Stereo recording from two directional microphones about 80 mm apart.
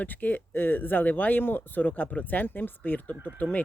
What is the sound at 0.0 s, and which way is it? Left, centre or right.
Speech, left.